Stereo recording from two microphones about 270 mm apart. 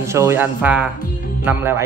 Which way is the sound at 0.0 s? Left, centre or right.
Centre.